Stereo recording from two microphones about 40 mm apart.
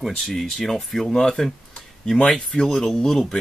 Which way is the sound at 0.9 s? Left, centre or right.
Centre.